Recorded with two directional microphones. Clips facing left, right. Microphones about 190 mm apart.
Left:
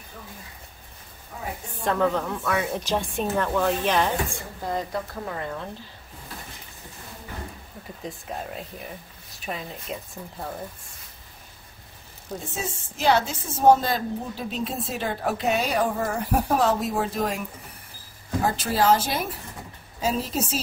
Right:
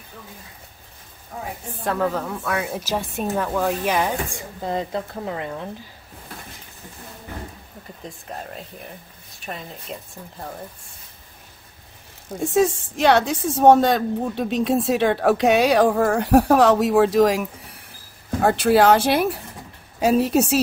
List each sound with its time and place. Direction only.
1.9 s speech: 5° right (ahead or behind)
4.6 s speech: 20° right (ahead or behind)
8.0 s speech: centre (ahead or behind)
12.4 s a woman's voice: 80° right
18.4 s a woman's voice: 65° right (ahead or behind)